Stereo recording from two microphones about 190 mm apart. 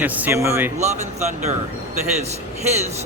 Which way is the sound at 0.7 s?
35° right (ahead or behind).